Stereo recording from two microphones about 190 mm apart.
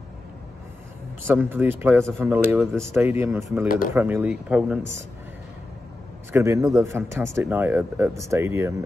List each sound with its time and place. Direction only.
1.2 s speech: 10° right (ahead or behind)
2.6 s speech: centre (ahead or behind)
2.9 s speech: 10° right (ahead or behind)
6.3 s speech: 15° right (ahead or behind)